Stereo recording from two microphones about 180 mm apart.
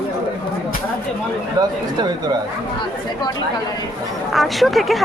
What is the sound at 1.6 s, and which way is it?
Speech, 25° right (ahead or behind).